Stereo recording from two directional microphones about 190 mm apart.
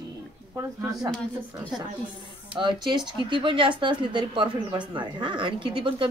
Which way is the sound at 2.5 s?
25° right (ahead or behind).